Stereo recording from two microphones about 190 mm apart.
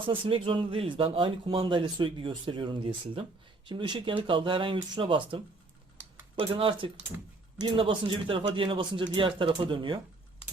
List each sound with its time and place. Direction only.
0.0 s speech: 25° right (ahead or behind)
6.4 s speech: 30° right (ahead or behind)